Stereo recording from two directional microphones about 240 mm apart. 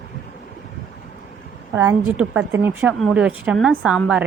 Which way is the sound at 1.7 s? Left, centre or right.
Centre.